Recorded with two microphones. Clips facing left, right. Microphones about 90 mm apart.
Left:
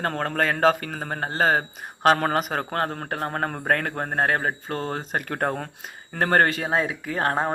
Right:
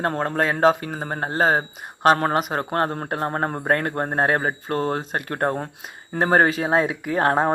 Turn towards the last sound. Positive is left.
turn(degrees=-15)  # may be behind; listen again after turning